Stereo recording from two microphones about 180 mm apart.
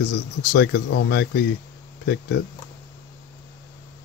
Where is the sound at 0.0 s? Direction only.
60° left (ahead or behind).